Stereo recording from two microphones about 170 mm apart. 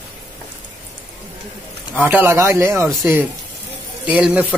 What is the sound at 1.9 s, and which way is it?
Speech, 10° right (ahead or behind).